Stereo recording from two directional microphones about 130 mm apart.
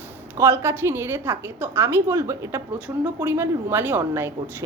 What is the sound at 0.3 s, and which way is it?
A woman's voice, 20° right (ahead or behind).